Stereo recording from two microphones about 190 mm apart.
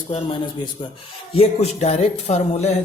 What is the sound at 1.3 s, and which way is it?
Speech, 35° left (ahead or behind).